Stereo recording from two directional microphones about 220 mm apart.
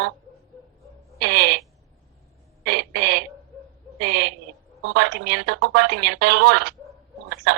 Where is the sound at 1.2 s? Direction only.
50° right (ahead or behind).